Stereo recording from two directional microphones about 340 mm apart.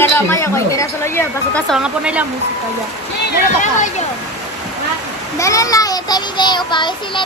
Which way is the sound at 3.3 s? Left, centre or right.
Left.